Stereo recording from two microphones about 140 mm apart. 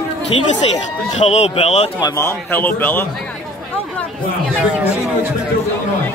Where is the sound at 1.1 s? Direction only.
50° left (ahead or behind).